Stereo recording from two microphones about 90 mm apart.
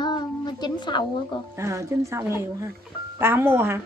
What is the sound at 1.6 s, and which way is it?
A woman's voice, 35° right (ahead or behind).